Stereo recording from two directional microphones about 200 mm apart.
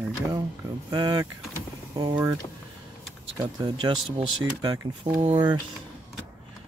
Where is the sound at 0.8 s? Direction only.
20° right (ahead or behind).